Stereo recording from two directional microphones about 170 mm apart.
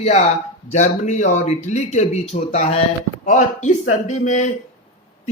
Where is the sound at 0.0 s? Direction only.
40° left (ahead or behind).